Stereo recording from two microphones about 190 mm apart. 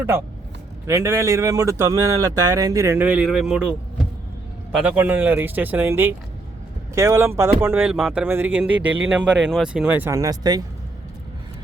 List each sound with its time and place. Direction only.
0.9 s speech: 15° right (ahead or behind)
4.8 s speech: 5° right (ahead or behind)